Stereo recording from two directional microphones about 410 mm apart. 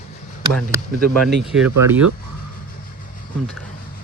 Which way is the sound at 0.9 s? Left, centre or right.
Right.